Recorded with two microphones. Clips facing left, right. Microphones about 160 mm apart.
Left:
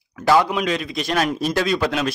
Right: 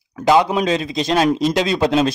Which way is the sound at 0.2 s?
20° right (ahead or behind).